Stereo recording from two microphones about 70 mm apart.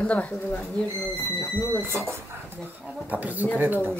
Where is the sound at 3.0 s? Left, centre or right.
Right.